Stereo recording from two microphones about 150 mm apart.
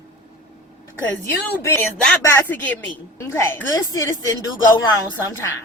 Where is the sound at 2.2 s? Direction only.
15° left (ahead or behind).